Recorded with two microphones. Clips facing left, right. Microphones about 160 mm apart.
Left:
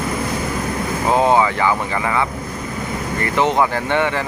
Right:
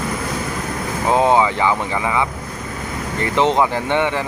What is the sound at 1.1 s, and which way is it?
Vehicle, 15° right (ahead or behind).